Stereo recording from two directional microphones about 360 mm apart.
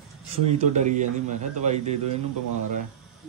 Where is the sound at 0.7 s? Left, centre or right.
Centre.